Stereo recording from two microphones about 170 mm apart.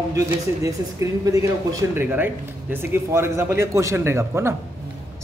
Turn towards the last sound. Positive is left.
turn(degrees=-15)  # may be behind; listen again after turning